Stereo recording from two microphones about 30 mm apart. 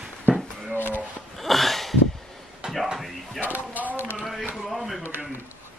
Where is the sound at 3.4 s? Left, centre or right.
Right.